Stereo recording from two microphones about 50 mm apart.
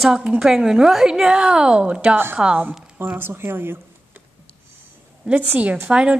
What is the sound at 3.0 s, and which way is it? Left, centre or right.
Speech, right.